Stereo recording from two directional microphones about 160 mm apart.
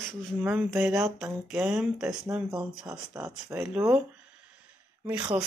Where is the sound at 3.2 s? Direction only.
20° right (ahead or behind).